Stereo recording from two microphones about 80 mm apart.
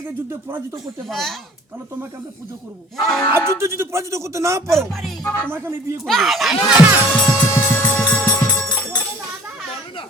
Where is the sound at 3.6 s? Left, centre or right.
Right.